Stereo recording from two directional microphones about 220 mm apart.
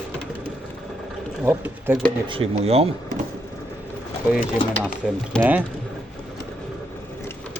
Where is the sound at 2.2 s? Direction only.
25° right (ahead or behind).